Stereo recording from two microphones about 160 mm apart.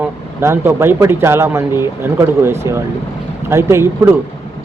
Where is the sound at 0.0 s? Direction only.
15° right (ahead or behind).